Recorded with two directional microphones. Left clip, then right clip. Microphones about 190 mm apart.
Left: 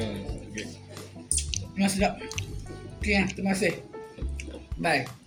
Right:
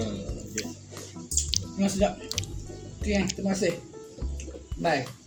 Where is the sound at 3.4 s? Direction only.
20° left (ahead or behind).